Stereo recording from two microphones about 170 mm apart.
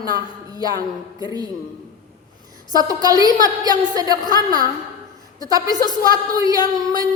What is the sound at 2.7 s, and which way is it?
A woman's voice, 20° right (ahead or behind).